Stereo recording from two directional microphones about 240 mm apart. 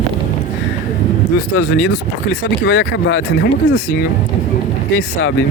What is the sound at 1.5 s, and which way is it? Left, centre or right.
Speech, left.